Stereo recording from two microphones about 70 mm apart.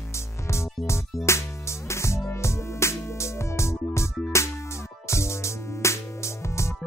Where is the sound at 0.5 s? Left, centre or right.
Left.